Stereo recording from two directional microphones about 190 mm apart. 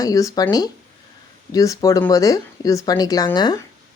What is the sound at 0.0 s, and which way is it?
Speech, 20° left (ahead or behind).